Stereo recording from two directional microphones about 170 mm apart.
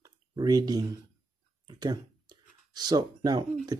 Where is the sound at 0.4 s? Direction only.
20° right (ahead or behind).